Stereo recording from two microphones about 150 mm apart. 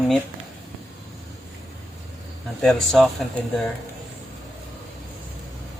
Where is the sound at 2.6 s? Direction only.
Centre (ahead or behind).